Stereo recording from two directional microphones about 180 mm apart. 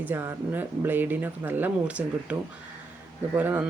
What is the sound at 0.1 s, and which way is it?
A man's voice, 10° right (ahead or behind).